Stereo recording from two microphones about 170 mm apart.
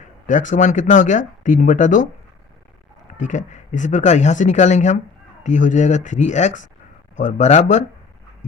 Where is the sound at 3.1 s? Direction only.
45° left (ahead or behind).